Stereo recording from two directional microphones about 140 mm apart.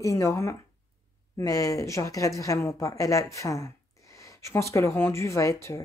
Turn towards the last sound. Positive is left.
turn(degrees=20)  # may be behind; listen again after turning